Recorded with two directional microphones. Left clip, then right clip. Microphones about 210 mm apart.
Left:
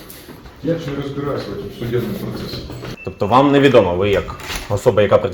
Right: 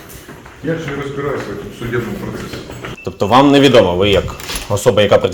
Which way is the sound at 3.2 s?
20° right (ahead or behind).